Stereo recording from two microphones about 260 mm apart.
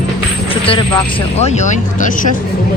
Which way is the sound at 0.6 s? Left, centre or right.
Left.